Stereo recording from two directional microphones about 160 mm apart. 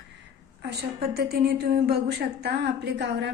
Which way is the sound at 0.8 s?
80° right.